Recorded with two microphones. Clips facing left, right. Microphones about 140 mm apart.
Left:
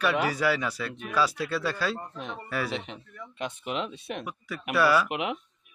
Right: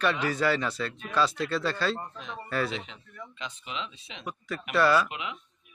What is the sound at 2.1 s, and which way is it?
Speech, 60° left (ahead or behind).